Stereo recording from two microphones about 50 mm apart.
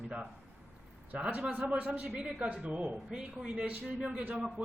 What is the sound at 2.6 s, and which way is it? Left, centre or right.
Speech, right.